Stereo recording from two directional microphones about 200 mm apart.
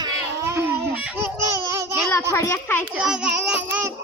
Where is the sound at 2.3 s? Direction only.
15° left (ahead or behind).